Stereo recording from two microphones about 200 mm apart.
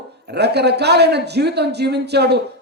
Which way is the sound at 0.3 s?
55° right (ahead or behind).